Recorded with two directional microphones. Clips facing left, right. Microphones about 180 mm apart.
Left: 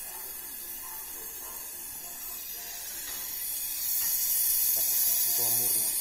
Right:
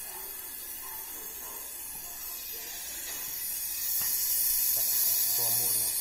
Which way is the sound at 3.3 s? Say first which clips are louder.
Even; 30° left (ahead or behind).